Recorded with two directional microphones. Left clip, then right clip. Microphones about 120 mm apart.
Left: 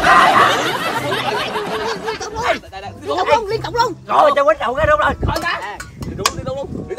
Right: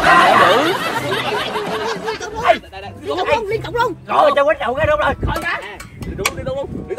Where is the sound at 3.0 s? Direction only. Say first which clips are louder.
Left 2 dB; 5° left (ahead or behind).